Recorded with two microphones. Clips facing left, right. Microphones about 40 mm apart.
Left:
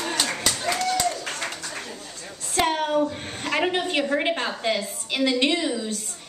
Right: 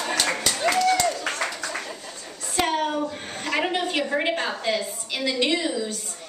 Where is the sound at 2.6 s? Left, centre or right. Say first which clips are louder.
Left 2 dB; left.